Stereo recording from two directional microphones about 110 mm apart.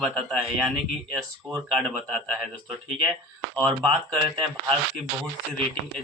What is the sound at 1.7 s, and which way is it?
Speech, centre (ahead or behind).